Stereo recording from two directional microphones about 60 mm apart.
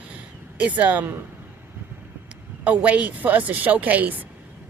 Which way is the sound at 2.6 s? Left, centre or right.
Right.